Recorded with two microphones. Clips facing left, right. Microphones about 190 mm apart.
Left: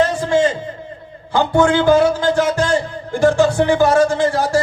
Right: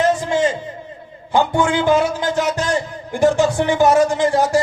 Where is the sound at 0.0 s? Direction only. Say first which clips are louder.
Left 1 dB; 20° right (ahead or behind).